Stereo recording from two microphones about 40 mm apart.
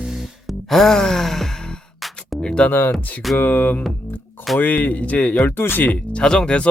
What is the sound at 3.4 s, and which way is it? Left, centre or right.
Music, left.